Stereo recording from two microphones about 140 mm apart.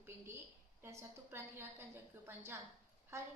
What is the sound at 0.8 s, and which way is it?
A woman's voice, 20° right (ahead or behind).